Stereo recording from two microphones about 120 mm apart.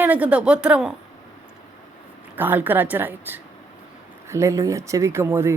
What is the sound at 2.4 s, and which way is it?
Speech, 15° right (ahead or behind).